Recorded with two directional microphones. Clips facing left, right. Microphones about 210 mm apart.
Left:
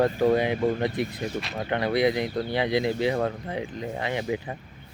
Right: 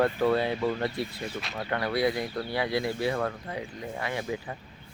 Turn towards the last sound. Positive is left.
turn(degrees=20)  # may be behind; listen again after turning